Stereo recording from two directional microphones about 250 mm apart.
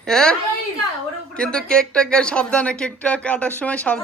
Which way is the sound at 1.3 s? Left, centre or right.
Centre.